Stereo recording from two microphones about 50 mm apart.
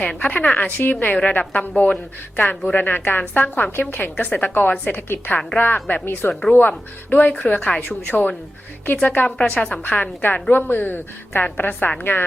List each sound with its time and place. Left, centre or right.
0.0 s speech: left
0.8 s a woman's voice: left
9.2 s speech: left
9.8 s a woman's voice: left